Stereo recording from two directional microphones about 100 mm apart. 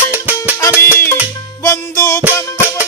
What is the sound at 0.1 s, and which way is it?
Music, 15° right (ahead or behind).